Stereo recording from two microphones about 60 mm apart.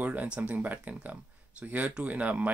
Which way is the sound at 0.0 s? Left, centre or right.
Right.